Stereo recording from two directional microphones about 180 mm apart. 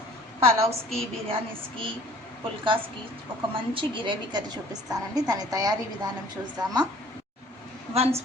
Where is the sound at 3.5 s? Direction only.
30° right (ahead or behind).